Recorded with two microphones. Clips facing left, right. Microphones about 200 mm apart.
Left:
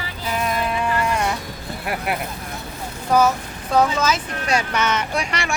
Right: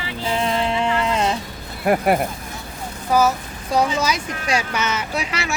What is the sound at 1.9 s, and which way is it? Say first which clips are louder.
Speech: right 9 dB; 50° right (ahead or behind).